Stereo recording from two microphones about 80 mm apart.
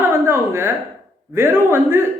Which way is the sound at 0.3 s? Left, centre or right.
Right.